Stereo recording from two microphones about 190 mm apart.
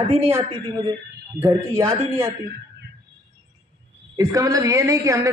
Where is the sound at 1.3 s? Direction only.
15° right (ahead or behind).